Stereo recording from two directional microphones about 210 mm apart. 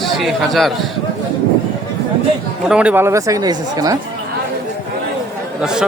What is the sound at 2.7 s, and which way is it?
Speech, 5° right (ahead or behind).